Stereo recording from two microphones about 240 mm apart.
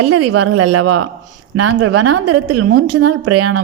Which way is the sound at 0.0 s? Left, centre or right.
Right.